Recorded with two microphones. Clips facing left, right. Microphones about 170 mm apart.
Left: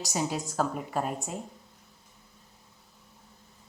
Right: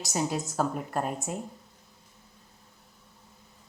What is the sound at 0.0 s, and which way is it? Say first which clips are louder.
A woman's voice: right 1 dB; centre (ahead or behind).